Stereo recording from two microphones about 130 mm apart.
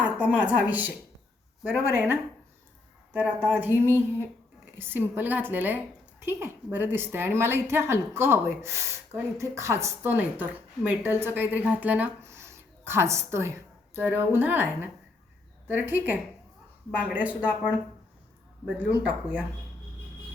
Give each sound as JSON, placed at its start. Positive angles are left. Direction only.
{"t": 0.0, "sound": "a woman's voice", "side_deg": -10}
{"t": 18.8, "sound": "a woman's voice", "side_deg": -10}